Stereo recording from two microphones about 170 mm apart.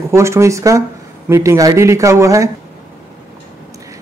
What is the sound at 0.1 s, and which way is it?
Speech, 15° right (ahead or behind).